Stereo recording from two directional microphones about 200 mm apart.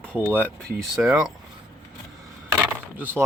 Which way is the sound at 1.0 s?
5° right (ahead or behind).